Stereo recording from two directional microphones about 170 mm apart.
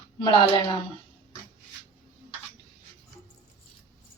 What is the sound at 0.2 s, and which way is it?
Speech, 30° left (ahead or behind).